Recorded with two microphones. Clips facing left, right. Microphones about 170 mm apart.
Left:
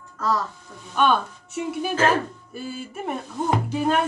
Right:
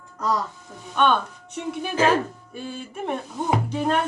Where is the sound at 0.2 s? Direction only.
15° right (ahead or behind).